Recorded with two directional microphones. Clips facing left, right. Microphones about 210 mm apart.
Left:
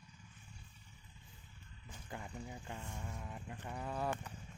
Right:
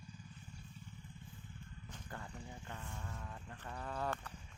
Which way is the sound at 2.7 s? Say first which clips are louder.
Left 2 dB; 15° left (ahead or behind).